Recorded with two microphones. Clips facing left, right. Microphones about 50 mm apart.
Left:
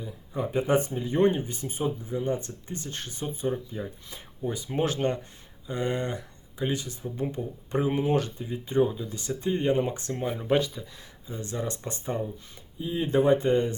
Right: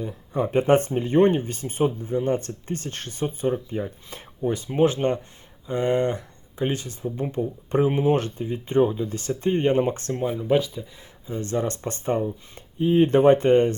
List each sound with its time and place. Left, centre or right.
0.0 s speech: right
4.7 s speech: centre
5.6 s speech: right
7.8 s speech: right
10.1 s speech: right
10.4 s speech: centre
11.9 s speech: right